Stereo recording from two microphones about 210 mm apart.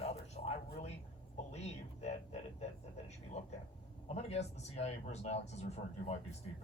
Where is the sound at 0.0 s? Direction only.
30° left (ahead or behind).